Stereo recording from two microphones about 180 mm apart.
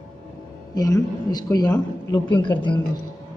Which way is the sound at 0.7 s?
20° left (ahead or behind).